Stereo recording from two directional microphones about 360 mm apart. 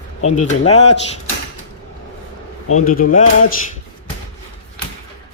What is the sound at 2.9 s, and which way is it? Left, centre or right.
Speech, left.